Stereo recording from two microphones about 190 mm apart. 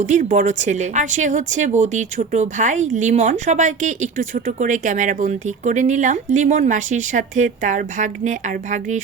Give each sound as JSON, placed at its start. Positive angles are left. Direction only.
{"t": 0.0, "sound": "a woman's voice", "side_deg": -40}